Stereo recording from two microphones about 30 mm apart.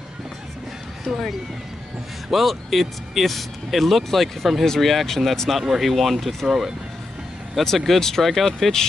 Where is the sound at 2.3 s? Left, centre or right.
Centre.